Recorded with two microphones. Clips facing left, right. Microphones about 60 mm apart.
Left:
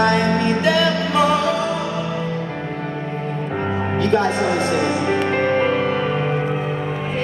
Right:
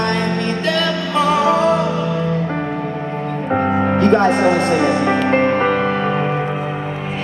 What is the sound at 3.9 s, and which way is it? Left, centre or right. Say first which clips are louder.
Music: right 4 dB; right.